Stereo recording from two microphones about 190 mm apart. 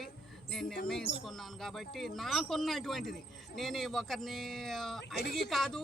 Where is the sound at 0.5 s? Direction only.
Centre (ahead or behind).